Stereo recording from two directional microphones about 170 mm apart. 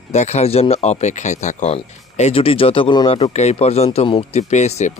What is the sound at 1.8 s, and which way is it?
Speech, 35° left (ahead or behind).